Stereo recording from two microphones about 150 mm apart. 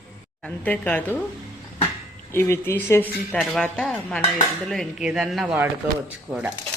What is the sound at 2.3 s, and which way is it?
Speech, 15° left (ahead or behind).